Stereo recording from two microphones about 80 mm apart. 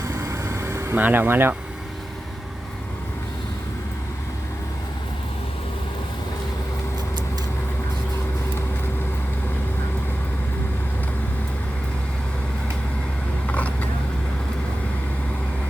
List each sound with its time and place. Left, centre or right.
0.1 s vehicle: right
0.9 s speech: right
13.5 s vehicle: centre